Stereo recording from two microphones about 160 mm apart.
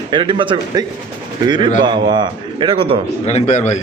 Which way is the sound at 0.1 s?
30° right (ahead or behind).